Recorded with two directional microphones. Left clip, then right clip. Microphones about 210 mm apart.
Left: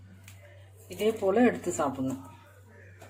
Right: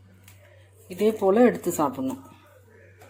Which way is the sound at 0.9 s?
40° right (ahead or behind).